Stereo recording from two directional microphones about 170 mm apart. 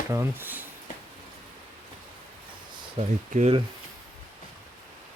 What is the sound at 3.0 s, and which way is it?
Speech, 40° right (ahead or behind).